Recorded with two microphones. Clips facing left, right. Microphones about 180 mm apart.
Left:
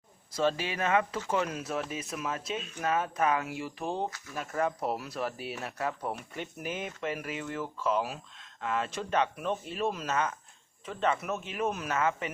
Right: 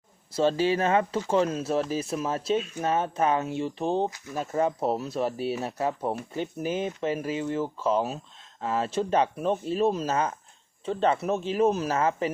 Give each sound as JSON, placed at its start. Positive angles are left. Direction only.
{"t": 0.3, "sound": "speech", "side_deg": -30}
{"t": 2.6, "sound": "speech", "side_deg": 0}
{"t": 2.8, "sound": "speech", "side_deg": -30}